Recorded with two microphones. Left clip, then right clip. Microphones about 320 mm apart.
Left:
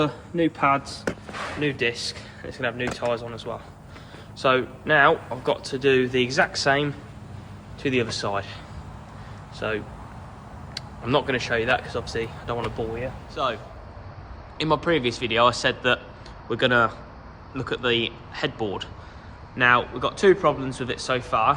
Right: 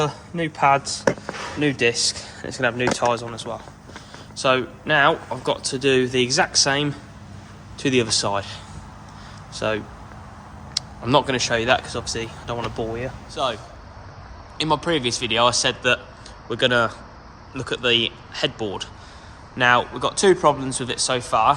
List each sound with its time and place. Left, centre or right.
1.5 s speech: centre
9.6 s speech: centre
14.6 s speech: centre